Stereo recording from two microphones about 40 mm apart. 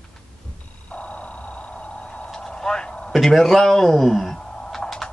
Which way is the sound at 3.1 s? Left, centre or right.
Centre.